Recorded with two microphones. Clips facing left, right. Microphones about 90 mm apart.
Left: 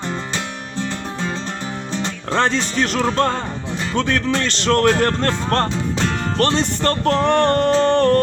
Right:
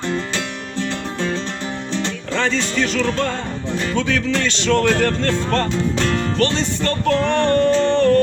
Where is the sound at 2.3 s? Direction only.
50° left (ahead or behind).